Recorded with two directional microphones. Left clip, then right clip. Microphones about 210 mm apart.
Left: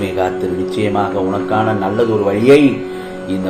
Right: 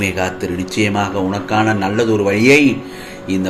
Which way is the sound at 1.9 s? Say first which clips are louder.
Left 1 dB; 45° right (ahead or behind).